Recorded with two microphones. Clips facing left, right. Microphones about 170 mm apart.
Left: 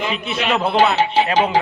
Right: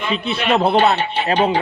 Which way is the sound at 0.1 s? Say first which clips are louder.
Right 2 dB; 30° right (ahead or behind).